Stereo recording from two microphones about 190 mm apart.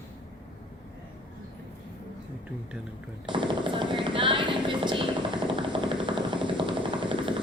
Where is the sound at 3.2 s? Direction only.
25° right (ahead or behind).